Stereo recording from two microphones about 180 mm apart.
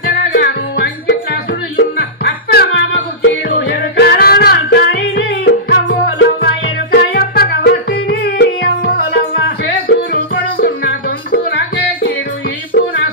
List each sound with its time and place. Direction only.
0.3 s music: 65° left (ahead or behind); by 6.2 s 80° left
6.9 s music: 60° left (ahead or behind)
8.8 s music: 50° left (ahead or behind)
9.4 s music: 65° left (ahead or behind)
12.7 s music: 60° left (ahead or behind)